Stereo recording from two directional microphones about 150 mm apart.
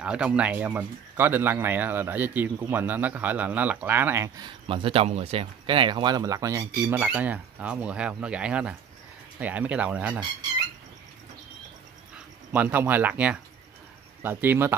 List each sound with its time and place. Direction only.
0.0 s speech: 5° right (ahead or behind)
4.4 s speech: 30° right (ahead or behind); by 10.2 s 10° right (ahead or behind)
12.5 s speech: 10° right (ahead or behind)